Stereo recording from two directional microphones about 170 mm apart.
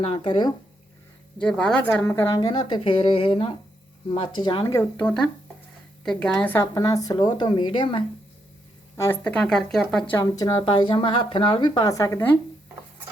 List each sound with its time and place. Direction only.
0.0 s speech: 35° left (ahead or behind)
1.4 s speech: 5° left (ahead or behind)
6.7 s speech: 20° left (ahead or behind)
9.0 s speech: 10° left (ahead or behind)
10.2 s speech: 25° left (ahead or behind)